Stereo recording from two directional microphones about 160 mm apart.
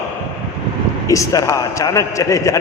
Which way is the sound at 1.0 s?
20° left (ahead or behind).